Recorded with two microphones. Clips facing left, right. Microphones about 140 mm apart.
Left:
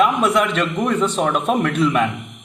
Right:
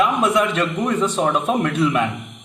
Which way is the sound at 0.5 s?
10° right (ahead or behind).